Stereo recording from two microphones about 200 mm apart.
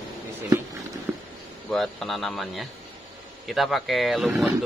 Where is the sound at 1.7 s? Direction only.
Centre (ahead or behind).